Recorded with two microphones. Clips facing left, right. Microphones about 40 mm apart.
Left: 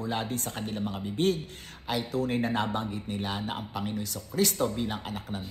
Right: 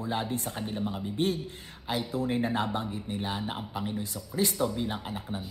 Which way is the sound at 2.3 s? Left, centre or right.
Centre.